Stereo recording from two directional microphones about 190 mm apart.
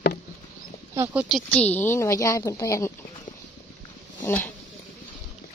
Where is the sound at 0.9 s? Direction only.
10° right (ahead or behind).